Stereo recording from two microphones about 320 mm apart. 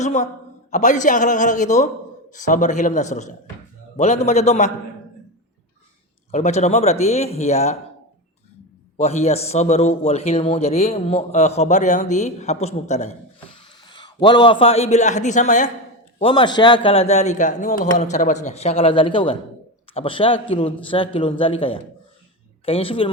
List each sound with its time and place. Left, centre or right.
0.0 s a man's voice: left
6.3 s a man's voice: left
9.0 s a man's voice: centre